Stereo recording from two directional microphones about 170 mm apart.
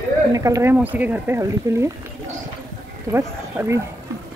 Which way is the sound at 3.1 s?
15° right (ahead or behind).